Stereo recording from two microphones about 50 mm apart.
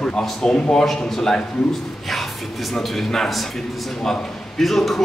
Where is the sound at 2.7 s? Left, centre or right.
Centre.